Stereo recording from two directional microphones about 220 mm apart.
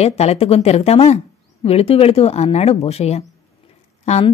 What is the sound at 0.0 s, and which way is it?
Speech, 30° left (ahead or behind).